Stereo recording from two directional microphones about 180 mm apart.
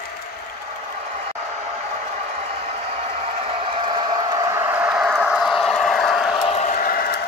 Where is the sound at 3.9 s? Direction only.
25° right (ahead or behind); by 6.4 s centre (ahead or behind).